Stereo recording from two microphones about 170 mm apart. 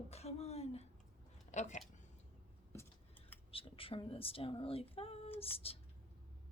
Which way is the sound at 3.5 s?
35° left (ahead or behind).